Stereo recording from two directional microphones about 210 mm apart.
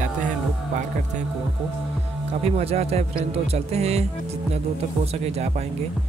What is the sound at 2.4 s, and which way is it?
Speech, 30° right (ahead or behind).